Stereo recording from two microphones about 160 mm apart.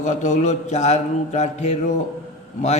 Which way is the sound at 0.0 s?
50° left (ahead or behind).